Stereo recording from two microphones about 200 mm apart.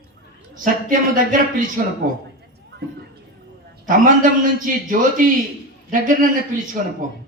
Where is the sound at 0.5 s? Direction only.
45° right (ahead or behind).